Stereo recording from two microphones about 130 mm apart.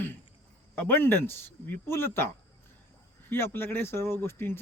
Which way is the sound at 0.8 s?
15° left (ahead or behind).